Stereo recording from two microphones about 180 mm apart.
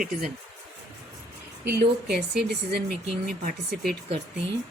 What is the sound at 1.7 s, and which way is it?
Speech, 55° right (ahead or behind).